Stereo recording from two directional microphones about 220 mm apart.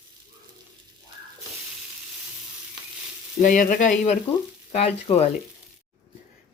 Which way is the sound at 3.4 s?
35° left (ahead or behind).